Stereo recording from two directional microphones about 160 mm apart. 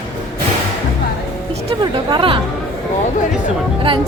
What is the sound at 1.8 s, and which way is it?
Speech, 30° right (ahead or behind).